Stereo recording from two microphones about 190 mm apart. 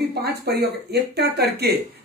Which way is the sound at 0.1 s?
60° right (ahead or behind).